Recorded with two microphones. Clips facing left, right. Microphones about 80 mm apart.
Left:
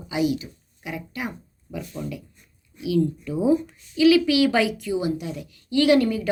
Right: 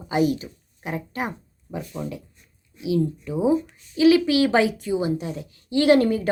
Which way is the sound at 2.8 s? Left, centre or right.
Right.